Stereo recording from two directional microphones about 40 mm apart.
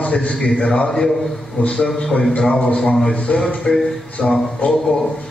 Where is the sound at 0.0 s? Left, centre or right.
Left.